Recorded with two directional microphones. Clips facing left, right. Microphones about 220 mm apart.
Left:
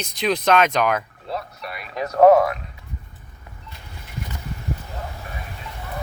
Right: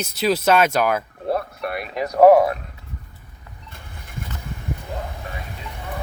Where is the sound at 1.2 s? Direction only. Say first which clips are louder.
Right 7 dB; 55° right (ahead or behind).